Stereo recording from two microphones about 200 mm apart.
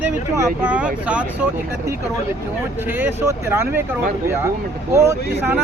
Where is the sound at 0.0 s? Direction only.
10° right (ahead or behind).